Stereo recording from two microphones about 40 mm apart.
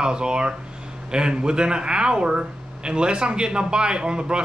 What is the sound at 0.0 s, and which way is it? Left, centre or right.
Speech, right.